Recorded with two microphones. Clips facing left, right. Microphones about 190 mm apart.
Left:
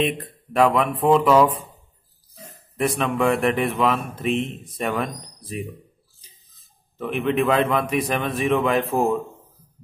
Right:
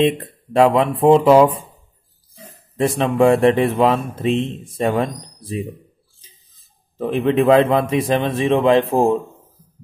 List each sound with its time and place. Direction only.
0.0 s speech: 30° right (ahead or behind)
3.0 s speech: 30° right (ahead or behind)
7.0 s speech: 35° right (ahead or behind)